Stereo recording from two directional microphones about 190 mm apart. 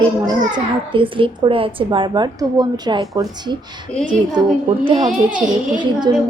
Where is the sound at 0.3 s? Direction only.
25° right (ahead or behind).